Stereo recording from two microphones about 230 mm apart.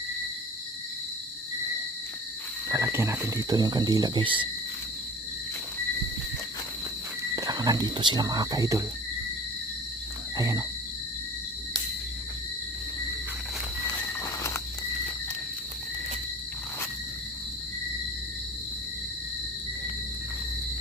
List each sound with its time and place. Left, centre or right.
2.6 s speech: centre
7.3 s speech: centre
10.3 s wild animals: centre
13.8 s walk: centre